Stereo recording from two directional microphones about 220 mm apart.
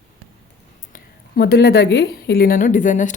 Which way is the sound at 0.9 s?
45° left (ahead or behind).